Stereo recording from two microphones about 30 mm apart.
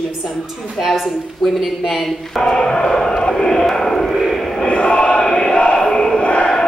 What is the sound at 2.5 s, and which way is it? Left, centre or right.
A man's voice, left.